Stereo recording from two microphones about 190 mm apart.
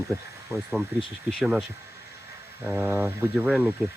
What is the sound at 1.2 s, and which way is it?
Speech, centre (ahead or behind).